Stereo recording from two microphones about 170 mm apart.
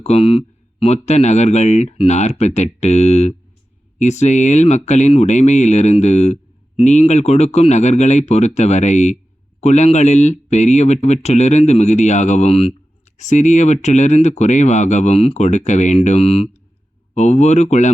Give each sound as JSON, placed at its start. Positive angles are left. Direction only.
{"t": 0.0, "sound": "speech", "side_deg": 35}